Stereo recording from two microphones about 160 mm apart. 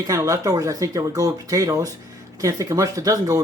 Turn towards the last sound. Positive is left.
turn(degrees=-20)  # may be behind; listen again after turning